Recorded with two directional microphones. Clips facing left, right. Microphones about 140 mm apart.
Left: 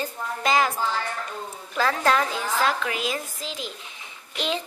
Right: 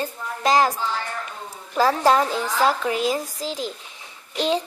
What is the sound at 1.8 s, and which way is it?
Speech, 10° right (ahead or behind).